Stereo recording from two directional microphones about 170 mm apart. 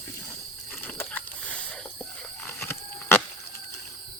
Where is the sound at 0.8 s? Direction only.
10° left (ahead or behind).